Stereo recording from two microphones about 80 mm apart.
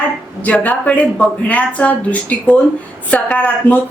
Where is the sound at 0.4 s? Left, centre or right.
Centre.